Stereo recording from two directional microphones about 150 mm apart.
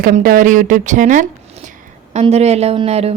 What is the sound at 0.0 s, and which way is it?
Speech, 65° right (ahead or behind).